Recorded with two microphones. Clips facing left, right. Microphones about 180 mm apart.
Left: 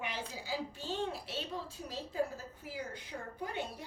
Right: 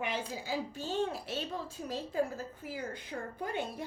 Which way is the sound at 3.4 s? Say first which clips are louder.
Right 3 dB; 50° right (ahead or behind).